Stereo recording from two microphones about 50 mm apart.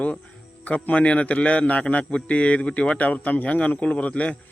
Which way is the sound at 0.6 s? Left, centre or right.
Left.